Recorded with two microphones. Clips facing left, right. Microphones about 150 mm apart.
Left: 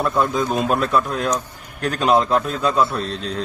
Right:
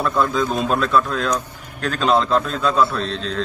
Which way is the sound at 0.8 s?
15° left (ahead or behind).